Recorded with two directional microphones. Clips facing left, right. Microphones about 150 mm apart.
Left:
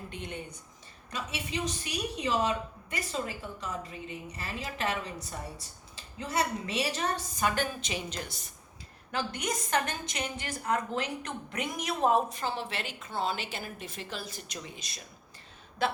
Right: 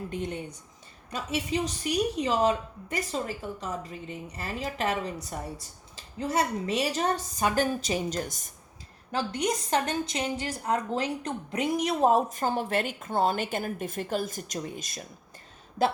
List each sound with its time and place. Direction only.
0.1 s a woman's voice: 40° right (ahead or behind)
9.1 s a woman's voice: 35° right (ahead or behind)